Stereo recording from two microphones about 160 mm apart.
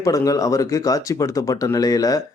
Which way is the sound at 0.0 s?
20° left (ahead or behind).